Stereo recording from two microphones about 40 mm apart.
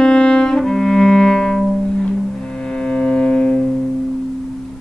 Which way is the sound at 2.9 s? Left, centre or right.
Left.